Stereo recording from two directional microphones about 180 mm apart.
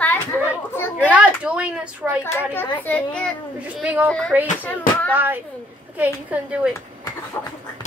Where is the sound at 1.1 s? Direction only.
5° right (ahead or behind).